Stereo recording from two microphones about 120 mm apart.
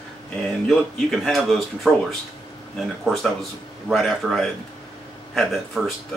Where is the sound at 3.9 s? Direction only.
Centre (ahead or behind).